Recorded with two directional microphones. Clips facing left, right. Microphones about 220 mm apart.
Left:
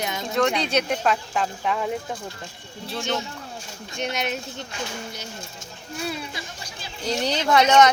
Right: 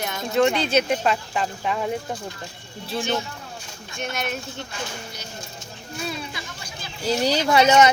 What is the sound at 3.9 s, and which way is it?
Speech, 20° left (ahead or behind).